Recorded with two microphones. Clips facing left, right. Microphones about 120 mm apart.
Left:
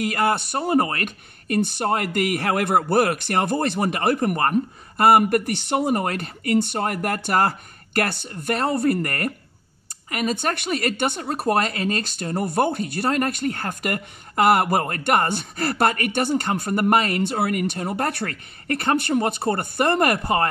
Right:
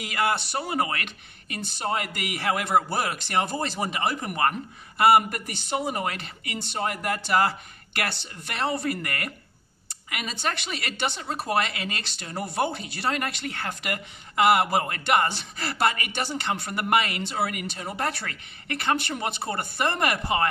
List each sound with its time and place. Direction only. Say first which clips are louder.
0.0 s speech: left 5 dB; 50° left (ahead or behind)